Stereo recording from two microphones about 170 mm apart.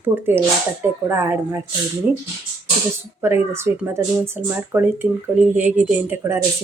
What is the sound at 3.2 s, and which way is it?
Speech, 15° right (ahead or behind).